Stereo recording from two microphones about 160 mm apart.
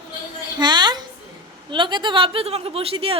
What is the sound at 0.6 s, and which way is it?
A woman's voice, 25° right (ahead or behind).